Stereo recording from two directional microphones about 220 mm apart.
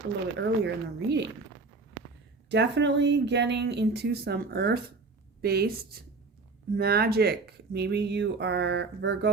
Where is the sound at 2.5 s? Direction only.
50° right (ahead or behind).